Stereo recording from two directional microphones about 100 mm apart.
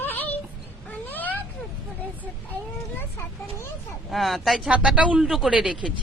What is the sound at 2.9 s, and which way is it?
Speech, 25° left (ahead or behind).